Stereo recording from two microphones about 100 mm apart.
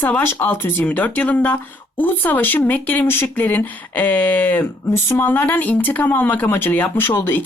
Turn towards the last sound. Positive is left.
turn(degrees=20)  # may be behind; listen again after turning